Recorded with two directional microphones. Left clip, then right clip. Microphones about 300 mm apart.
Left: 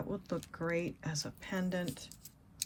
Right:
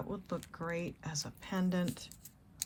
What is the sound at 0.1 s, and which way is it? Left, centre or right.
Speech, centre.